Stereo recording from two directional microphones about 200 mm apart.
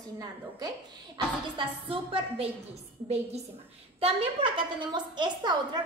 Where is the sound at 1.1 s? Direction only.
25° right (ahead or behind).